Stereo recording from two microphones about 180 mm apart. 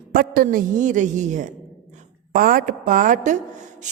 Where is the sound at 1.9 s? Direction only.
50° right (ahead or behind).